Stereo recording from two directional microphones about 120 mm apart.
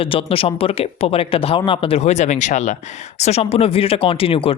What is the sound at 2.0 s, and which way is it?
Speech, 70° left (ahead or behind).